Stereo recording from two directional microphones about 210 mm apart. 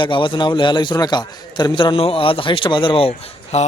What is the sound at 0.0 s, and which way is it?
A man's voice, 25° left (ahead or behind).